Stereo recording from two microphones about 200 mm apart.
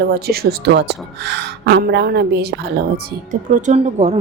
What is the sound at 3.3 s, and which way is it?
Speech, 40° right (ahead or behind).